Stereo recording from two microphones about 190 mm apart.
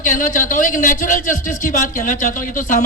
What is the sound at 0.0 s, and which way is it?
A man's voice, 45° left (ahead or behind).